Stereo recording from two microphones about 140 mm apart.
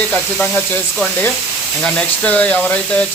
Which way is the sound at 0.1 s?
10° left (ahead or behind).